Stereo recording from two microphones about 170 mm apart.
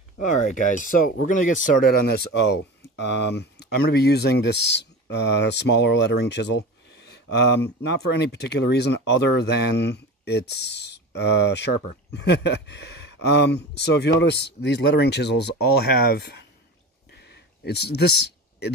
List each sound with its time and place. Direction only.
0.2 s speech: 50° left (ahead or behind); by 2.4 s 70° left (ahead or behind)
3.0 s speech: 90° left; by 4.8 s 75° left (ahead or behind)
5.4 s speech: 90° left; by 16.4 s 75° left (ahead or behind)
17.2 s a sound: 75° left (ahead or behind)